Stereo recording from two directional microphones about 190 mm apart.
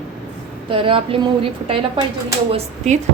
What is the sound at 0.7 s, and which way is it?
A woman's voice, 30° right (ahead or behind).